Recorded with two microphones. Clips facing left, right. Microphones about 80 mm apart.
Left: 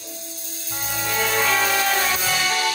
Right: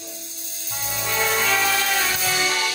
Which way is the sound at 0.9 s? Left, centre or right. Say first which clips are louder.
Even; left.